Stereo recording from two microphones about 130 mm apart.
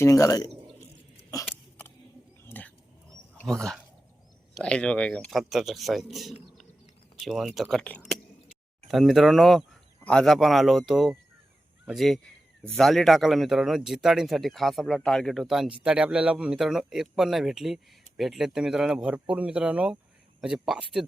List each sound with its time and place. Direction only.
0.0 s a man's voice: 25° left (ahead or behind)
2.4 s wild animals: 15° left (ahead or behind)
3.4 s speech: 5° left (ahead or behind)